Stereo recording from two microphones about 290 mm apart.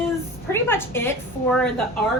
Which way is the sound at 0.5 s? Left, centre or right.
Centre.